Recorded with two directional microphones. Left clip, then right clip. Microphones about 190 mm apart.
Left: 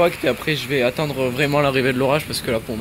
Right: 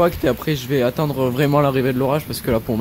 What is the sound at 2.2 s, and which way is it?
Speech, 20° right (ahead or behind).